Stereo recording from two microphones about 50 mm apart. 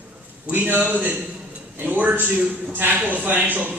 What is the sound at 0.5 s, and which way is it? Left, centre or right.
A man's voice, right.